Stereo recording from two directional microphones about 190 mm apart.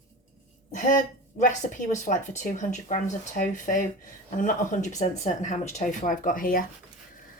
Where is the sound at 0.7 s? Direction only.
40° left (ahead or behind).